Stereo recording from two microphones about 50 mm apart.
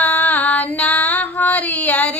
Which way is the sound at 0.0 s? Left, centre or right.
Left.